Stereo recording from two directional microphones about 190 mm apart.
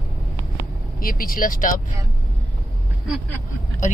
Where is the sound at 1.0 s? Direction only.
50° left (ahead or behind).